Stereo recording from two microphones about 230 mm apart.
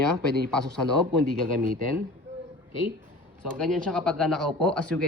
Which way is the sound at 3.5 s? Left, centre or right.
Centre.